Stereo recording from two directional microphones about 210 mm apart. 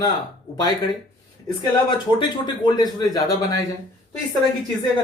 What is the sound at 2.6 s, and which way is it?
Speech, 20° left (ahead or behind).